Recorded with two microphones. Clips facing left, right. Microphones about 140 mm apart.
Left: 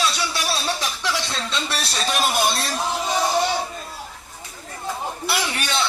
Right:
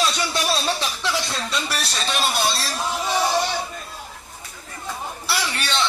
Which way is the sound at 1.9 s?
5° left (ahead or behind).